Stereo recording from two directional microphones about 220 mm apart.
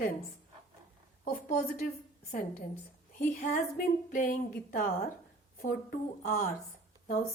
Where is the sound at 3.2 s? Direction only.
40° left (ahead or behind).